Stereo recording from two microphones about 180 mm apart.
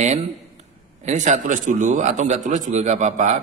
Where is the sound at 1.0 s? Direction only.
40° right (ahead or behind).